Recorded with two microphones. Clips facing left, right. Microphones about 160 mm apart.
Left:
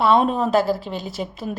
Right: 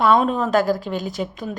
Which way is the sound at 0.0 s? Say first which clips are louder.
Even; 30° left (ahead or behind).